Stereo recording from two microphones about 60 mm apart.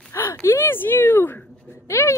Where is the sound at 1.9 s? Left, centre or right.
Left.